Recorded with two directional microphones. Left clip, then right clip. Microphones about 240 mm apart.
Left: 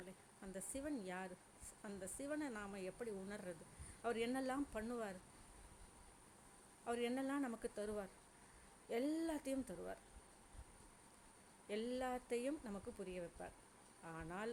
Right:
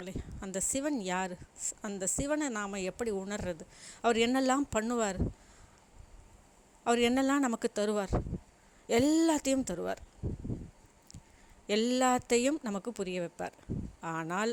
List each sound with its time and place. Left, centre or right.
0.0 s speech: right
6.8 s speech: right
11.7 s speech: right